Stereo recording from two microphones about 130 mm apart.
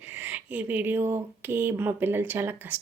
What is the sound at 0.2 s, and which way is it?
Speech, 10° right (ahead or behind).